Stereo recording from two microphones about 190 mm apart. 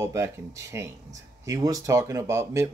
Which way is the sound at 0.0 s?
15° right (ahead or behind).